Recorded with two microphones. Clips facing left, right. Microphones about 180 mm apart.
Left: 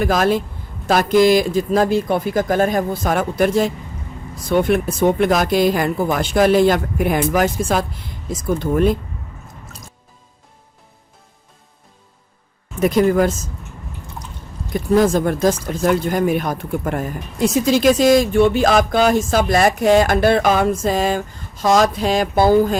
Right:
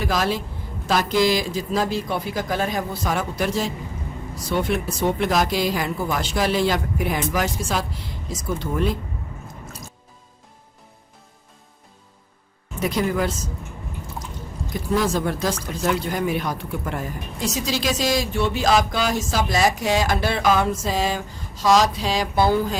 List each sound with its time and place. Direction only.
0.0 s speech: 55° left (ahead or behind)
12.8 s speech: 50° left (ahead or behind)
14.7 s speech: 50° left (ahead or behind)